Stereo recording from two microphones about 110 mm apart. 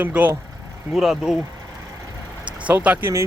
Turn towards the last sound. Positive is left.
turn(degrees=-25)  # may be behind; listen again after turning